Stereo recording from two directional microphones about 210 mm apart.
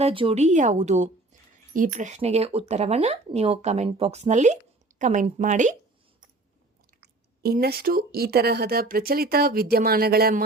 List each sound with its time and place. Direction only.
0.0 s speech: 25° right (ahead or behind)
7.0 s speech: 50° right (ahead or behind)